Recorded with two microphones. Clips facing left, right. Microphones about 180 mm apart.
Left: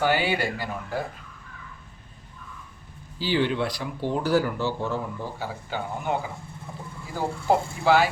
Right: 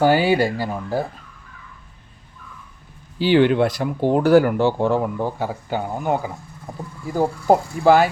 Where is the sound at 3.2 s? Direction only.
60° right (ahead or behind).